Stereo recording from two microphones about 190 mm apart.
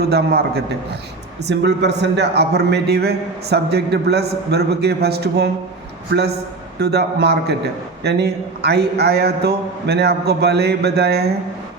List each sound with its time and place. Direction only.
0.1 s a man's voice: 55° right (ahead or behind)
6.7 s a man's voice: 60° right (ahead or behind)